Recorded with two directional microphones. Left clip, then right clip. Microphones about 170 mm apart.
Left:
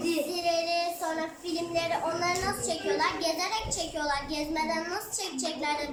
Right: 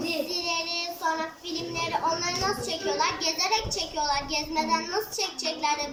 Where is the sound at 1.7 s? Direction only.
Centre (ahead or behind).